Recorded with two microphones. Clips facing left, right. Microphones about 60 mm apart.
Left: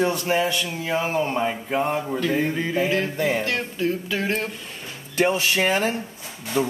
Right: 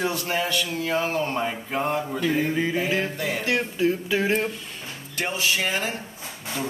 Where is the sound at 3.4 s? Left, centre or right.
Centre.